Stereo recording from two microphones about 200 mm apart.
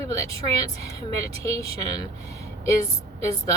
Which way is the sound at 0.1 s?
15° left (ahead or behind).